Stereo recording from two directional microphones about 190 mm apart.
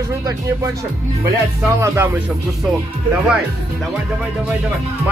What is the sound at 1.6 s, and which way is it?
Music, 15° right (ahead or behind).